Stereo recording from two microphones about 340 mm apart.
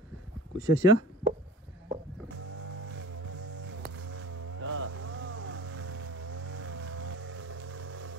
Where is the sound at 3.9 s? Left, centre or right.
Right.